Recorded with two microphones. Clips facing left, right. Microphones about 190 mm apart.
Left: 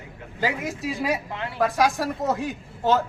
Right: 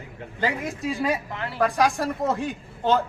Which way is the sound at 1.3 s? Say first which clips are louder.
Even; 20° left (ahead or behind).